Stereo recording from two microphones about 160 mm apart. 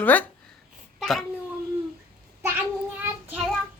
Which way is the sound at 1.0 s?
Centre (ahead or behind).